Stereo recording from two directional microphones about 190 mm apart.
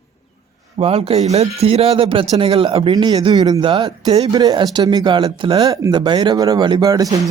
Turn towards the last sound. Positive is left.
turn(degrees=-20)  # may be behind; listen again after turning